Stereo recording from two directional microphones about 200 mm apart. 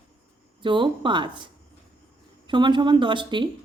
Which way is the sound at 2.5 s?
25° right (ahead or behind).